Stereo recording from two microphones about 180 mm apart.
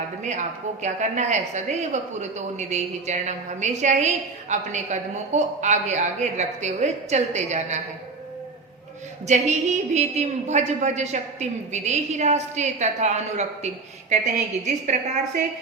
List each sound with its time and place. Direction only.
0.2 s a woman's voice: 40° right (ahead or behind)
9.2 s a woman's voice: 40° right (ahead or behind)